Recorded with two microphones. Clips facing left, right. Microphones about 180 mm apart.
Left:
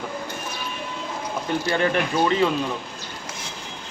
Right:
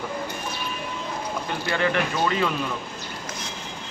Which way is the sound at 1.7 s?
25° left (ahead or behind).